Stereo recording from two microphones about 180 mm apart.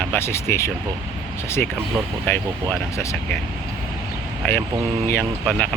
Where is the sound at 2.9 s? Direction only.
15° left (ahead or behind).